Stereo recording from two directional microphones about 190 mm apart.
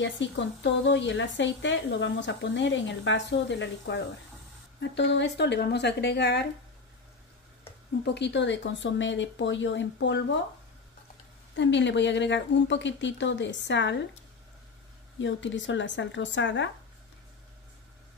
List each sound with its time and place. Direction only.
0.0 s speech: 70° left (ahead or behind)
8.0 s speech: 65° left (ahead or behind)
11.5 s speech: 70° left (ahead or behind)
15.1 s speech: 75° left (ahead or behind)